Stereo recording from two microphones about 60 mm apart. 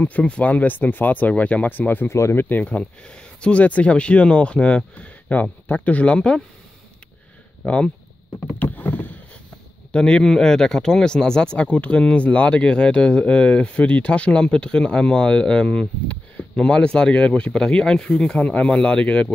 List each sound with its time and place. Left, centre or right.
0.0 s speech: left
2.0 s speech: left
2.6 s speech: left
7.6 s speech: left
8.7 s rowboat: left
9.9 s speech: centre
18.5 s speech: centre